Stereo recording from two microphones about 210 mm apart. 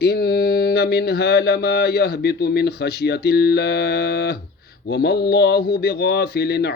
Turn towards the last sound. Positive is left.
turn(degrees=50)  # may be behind; listen again after turning